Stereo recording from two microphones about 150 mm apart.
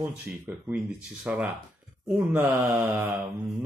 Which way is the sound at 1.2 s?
10° right (ahead or behind).